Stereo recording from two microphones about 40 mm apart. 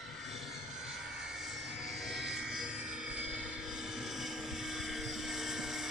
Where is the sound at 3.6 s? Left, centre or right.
Centre.